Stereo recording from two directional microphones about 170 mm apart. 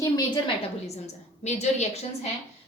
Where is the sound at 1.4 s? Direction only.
40° left (ahead or behind).